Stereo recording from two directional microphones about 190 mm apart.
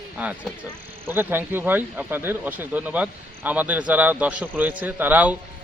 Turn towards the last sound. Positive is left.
turn(degrees=-10)  # may be behind; listen again after turning